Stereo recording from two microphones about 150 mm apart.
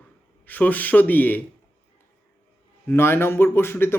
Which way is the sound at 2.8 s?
15° left (ahead or behind).